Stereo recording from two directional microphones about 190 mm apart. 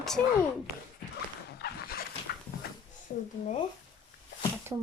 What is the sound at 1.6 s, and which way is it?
Dog, 55° left (ahead or behind).